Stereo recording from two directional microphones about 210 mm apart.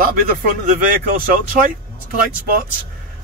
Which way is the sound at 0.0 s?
40° right (ahead or behind).